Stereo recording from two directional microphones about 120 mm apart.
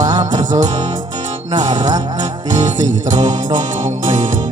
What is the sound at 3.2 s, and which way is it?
Music, 35° right (ahead or behind).